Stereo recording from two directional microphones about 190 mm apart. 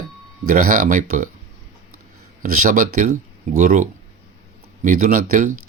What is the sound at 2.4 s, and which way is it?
Speech, 45° right (ahead or behind).